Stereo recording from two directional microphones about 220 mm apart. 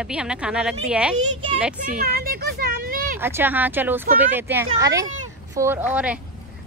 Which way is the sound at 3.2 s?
10° right (ahead or behind).